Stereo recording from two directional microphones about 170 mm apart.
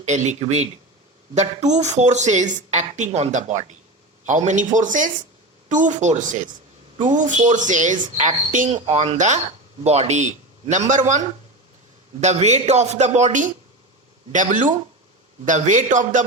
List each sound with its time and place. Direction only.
0.0 s a woman's voice: 45° right (ahead or behind)
12.2 s a man's voice: 40° right (ahead or behind)